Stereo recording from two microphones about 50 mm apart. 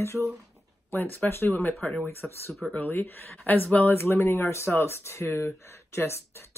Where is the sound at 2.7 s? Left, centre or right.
Left.